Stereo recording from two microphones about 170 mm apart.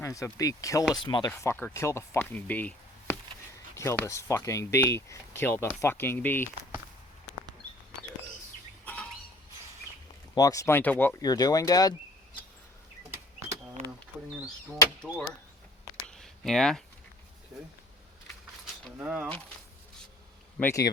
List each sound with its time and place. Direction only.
0.0 s speech: 20° left (ahead or behind)
1.3 s speech: 10° left (ahead or behind)
8.8 s bird: 10° left (ahead or behind)
10.3 s speech: 20° left (ahead or behind)
11.2 s speech: 20° left (ahead or behind)
15.0 s speech: 5° left (ahead or behind)
16.0 s a sound: centre (ahead or behind)
18.9 s speech: 10° right (ahead or behind)
20.6 s speech: 15° left (ahead or behind)